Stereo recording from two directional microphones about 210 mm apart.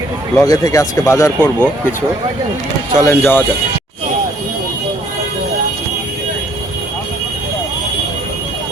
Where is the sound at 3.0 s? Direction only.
10° left (ahead or behind).